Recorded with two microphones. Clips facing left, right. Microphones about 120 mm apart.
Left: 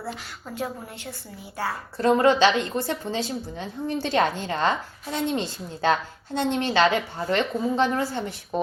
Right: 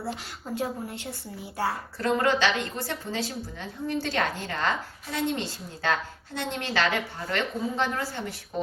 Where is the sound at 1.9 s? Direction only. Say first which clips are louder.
Left 7 dB; 25° left (ahead or behind).